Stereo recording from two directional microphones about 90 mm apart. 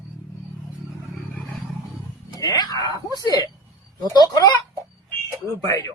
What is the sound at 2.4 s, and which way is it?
A man's voice, 40° left (ahead or behind).